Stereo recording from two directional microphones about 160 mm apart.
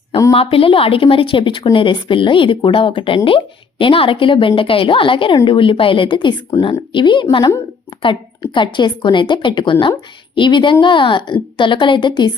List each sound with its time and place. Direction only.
0.3 s a woman's voice: 35° left (ahead or behind)